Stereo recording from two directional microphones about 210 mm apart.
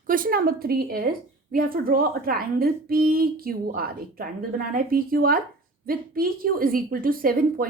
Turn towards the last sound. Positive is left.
turn(degrees=-45)  # may be behind; listen again after turning